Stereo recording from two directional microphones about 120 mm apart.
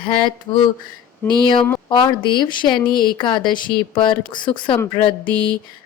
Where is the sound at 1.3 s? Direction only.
40° left (ahead or behind).